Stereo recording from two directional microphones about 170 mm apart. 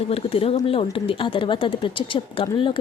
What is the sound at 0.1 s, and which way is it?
Speech, 35° left (ahead or behind).